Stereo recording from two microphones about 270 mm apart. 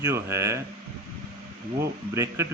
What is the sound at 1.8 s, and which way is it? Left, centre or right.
Speech, centre.